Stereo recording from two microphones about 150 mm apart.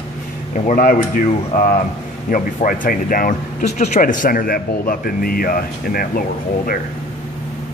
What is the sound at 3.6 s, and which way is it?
Speech, 50° left (ahead or behind).